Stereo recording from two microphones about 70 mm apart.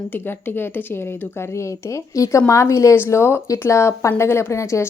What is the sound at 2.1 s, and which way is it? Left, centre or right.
A woman's voice, left.